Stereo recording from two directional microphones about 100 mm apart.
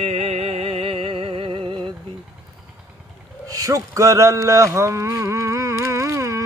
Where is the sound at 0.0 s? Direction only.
90° right; by 1.8 s 70° right (ahead or behind).